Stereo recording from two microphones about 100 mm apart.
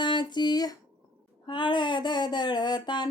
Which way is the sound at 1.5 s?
50° left (ahead or behind).